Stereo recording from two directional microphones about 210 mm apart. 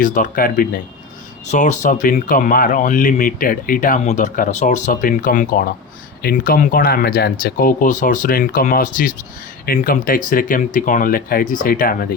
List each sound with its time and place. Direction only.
0.0 s speech: 40° left (ahead or behind)